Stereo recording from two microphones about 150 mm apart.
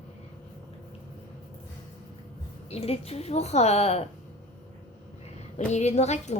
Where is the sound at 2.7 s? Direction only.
40° left (ahead or behind).